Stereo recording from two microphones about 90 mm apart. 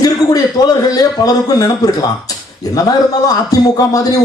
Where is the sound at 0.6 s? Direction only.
50° left (ahead or behind).